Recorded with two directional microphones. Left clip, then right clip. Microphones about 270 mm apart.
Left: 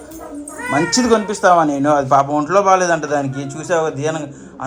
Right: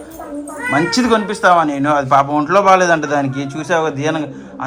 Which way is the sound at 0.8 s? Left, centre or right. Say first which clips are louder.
Even; centre.